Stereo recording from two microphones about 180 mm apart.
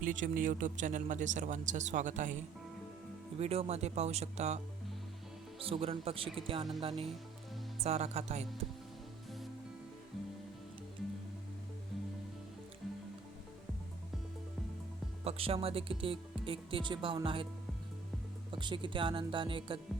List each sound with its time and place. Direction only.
0.0 s speech: 50° right (ahead or behind)
15.2 s speech: 35° right (ahead or behind)
18.5 s speech: 25° right (ahead or behind)